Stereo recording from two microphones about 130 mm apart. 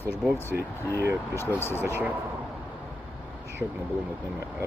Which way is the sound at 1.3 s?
20° left (ahead or behind).